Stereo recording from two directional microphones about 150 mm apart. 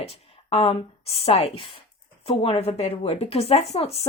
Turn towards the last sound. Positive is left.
turn(degrees=40)  # may be behind; listen again after turning